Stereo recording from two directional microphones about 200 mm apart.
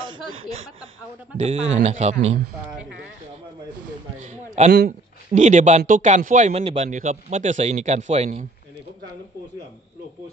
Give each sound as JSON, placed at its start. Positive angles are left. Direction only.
{"t": 1.4, "sound": "speech", "side_deg": -30}
{"t": 4.2, "sound": "speech", "side_deg": -35}